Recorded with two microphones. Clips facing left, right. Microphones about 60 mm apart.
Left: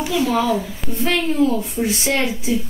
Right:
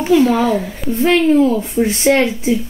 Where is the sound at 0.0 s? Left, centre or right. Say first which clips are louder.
Right 6 dB; right.